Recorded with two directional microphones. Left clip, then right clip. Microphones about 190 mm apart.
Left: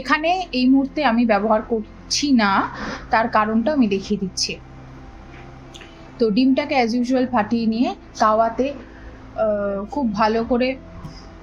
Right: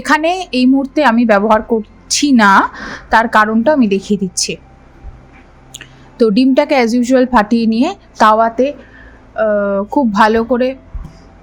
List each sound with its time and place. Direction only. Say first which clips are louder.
0.0 s a woman's voice: right 6 dB; 45° right (ahead or behind)
5.7 s a woman's voice: right 10 dB; 50° right (ahead or behind)
10.5 s speech: right 6 dB; 30° right (ahead or behind)